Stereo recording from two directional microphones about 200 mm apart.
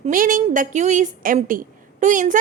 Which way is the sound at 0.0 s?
40° right (ahead or behind).